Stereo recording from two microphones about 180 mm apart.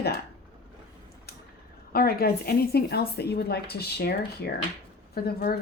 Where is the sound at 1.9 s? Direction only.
55° left (ahead or behind).